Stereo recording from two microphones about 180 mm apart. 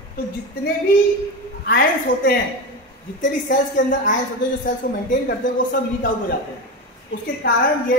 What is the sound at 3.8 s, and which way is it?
Speech, 80° left.